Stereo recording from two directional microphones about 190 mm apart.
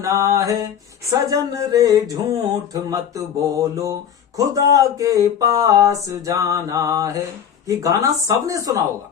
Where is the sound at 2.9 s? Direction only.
15° right (ahead or behind).